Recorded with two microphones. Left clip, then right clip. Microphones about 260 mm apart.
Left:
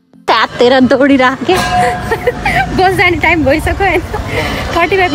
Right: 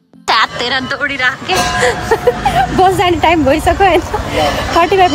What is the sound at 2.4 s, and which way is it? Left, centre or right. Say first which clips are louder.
Speech: left 2 dB; centre.